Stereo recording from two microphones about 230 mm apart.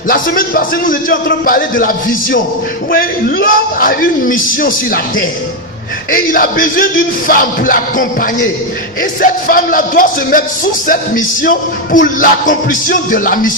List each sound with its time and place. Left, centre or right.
0.1 s music: left